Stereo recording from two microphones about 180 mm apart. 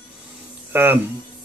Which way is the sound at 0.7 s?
10° right (ahead or behind).